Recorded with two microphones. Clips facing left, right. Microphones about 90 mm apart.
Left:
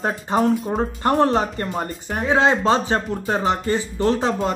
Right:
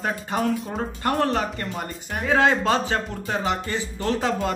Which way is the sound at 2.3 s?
25° left (ahead or behind).